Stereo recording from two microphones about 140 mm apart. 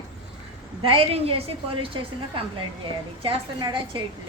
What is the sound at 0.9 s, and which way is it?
A woman's voice, 45° right (ahead or behind).